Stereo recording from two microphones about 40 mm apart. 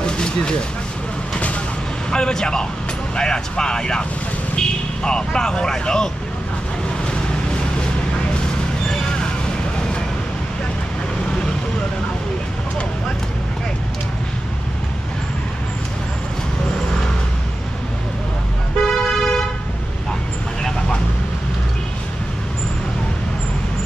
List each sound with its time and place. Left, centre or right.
0.0 s vehicle: left
2.0 s speech: centre
8.8 s vehicle: centre
18.9 s vehicle: centre